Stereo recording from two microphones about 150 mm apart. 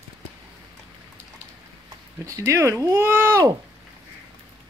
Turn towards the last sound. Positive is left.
turn(degrees=-15)  # may be behind; listen again after turning